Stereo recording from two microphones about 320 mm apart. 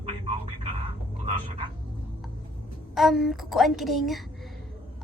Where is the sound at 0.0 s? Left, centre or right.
Centre.